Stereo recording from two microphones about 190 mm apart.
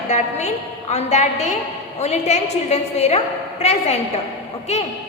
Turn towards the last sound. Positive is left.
turn(degrees=35)  # may be behind; listen again after turning